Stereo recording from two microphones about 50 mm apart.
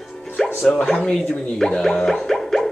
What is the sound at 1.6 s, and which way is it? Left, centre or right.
Music, centre.